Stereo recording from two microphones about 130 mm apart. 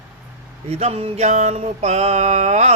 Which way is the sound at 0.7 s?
55° right (ahead or behind).